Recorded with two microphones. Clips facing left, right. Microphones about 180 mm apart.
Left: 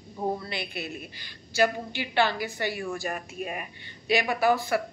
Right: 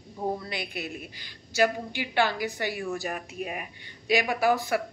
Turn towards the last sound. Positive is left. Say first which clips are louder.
# even
turn(degrees=-10)  # may be behind; listen again after turning